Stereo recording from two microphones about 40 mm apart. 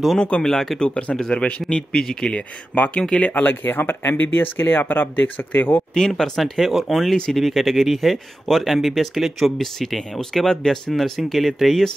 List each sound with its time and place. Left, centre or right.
0.2 s speech: left
0.5 s speech: centre
0.8 s speech: left
1.6 s speech: centre
2.2 s speech: left
3.4 s speech: left
5.9 s speech: centre
6.3 s speech: centre